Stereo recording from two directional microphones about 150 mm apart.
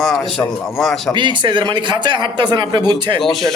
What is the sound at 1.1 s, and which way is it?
Speech, 30° right (ahead or behind).